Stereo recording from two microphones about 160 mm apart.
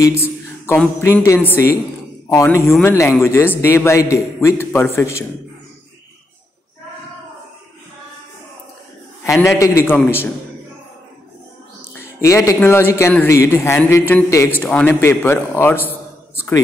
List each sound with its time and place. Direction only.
0.0 s a man's voice: 15° left (ahead or behind)
9.2 s a man's voice: 15° left (ahead or behind)
11.8 s music: 15° left (ahead or behind)
12.6 s a man's voice: 15° left (ahead or behind)
14.7 s a man's voice: 5° left (ahead or behind)